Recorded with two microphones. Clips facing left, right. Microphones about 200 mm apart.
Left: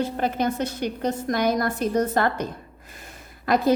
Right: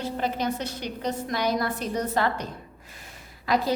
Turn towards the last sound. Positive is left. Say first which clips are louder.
# left 5 dB
turn(degrees=50)  # may be behind; listen again after turning